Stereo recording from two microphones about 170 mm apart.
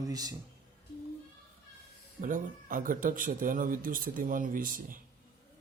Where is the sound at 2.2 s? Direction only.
50° right (ahead or behind).